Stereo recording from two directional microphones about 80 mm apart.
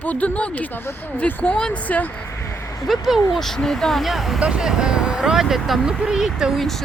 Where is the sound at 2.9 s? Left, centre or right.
Centre.